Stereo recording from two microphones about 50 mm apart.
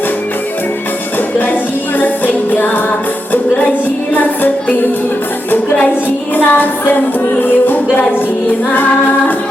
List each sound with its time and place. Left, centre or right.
2.0 s music: left
4.1 s music: left
6.3 s singing: left